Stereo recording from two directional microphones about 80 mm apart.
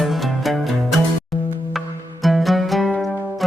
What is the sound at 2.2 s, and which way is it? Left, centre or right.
Music, centre.